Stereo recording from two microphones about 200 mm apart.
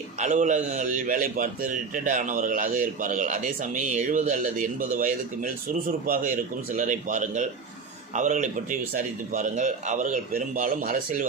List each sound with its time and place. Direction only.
0.2 s a man's voice: 40° right (ahead or behind)